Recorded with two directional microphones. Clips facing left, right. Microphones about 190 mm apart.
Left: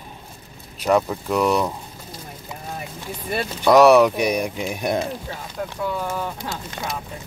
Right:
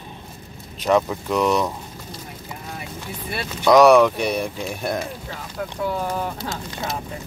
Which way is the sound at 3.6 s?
5° left (ahead or behind).